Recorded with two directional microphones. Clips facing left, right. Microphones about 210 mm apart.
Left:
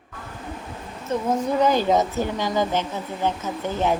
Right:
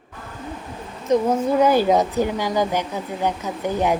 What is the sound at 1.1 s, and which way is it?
Speech, 15° right (ahead or behind).